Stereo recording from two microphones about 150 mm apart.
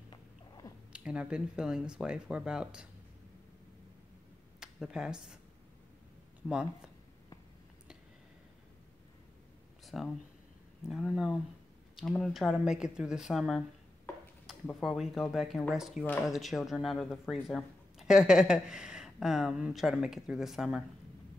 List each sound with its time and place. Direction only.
0.9 s speech: 5° right (ahead or behind)
4.6 s speech: 5° right (ahead or behind)
9.8 s speech: centre (ahead or behind)
14.8 s speech: centre (ahead or behind)